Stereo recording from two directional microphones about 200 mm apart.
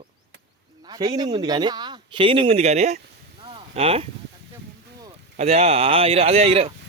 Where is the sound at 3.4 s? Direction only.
25° right (ahead or behind).